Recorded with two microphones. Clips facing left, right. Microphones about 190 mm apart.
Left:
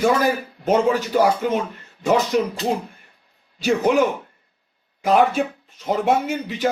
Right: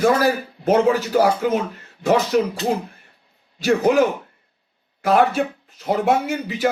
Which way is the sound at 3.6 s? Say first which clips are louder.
Right 1 dB; 5° right (ahead or behind).